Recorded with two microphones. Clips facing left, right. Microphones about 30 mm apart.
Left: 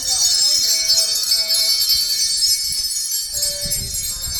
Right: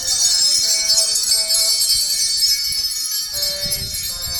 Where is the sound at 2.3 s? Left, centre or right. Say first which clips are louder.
Right 1 dB; centre; by 4.4 s right.